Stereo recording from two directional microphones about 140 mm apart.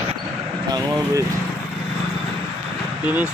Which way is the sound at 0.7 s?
25° right (ahead or behind).